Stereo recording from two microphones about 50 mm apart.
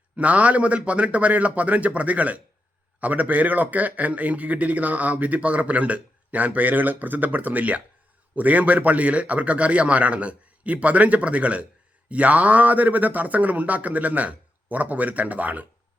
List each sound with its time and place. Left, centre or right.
0.2 s a man's voice: right